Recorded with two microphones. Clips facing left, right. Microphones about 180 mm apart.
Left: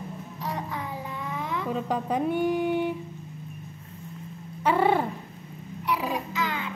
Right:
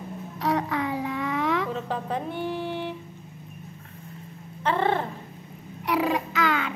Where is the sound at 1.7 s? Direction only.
15° left (ahead or behind).